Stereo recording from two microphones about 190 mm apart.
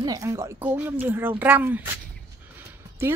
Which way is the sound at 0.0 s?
20° right (ahead or behind).